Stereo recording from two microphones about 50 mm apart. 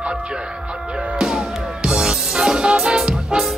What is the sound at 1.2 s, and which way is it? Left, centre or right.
Music, centre.